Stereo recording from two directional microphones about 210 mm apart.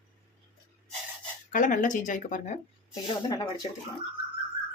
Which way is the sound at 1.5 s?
40° left (ahead or behind).